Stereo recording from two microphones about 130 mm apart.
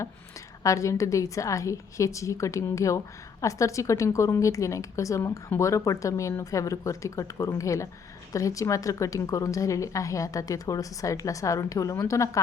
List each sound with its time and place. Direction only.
0.6 s a woman's voice: 25° left (ahead or behind)